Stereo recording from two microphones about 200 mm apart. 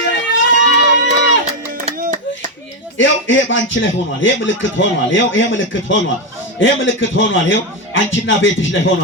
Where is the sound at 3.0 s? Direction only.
70° left (ahead or behind).